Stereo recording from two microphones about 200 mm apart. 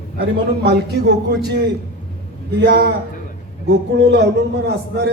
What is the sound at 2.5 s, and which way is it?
A man's voice, 55° right (ahead or behind).